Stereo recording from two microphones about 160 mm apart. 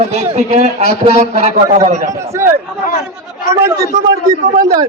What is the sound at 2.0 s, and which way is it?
Speech, 20° right (ahead or behind).